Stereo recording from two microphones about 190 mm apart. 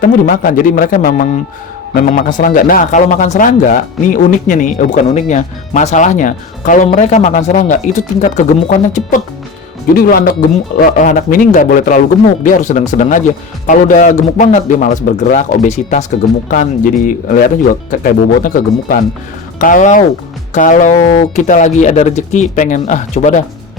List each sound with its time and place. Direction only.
0.0 s a man's voice: 45° left (ahead or behind)